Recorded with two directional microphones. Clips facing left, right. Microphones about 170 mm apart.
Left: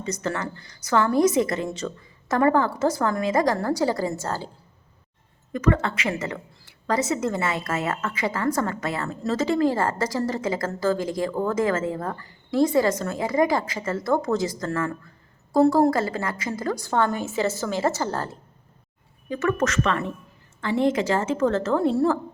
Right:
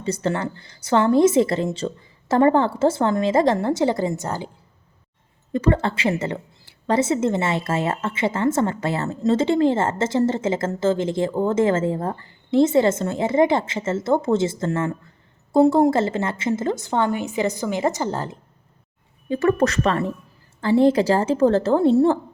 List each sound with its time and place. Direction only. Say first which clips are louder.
0.0 s a woman's voice: right 4 dB; 30° right (ahead or behind)
5.5 s a woman's voice: right 2 dB; 30° right (ahead or behind)
19.3 s a woman's voice: right 5 dB; 35° right (ahead or behind)